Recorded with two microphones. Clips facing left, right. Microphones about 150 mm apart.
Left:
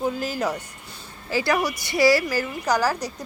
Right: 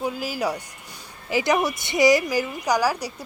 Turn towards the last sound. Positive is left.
turn(degrees=-10)  # may be behind; listen again after turning